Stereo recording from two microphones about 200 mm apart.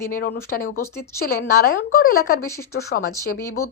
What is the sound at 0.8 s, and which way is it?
Speech, 15° left (ahead or behind).